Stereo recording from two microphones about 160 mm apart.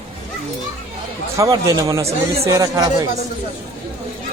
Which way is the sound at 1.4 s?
20° right (ahead or behind).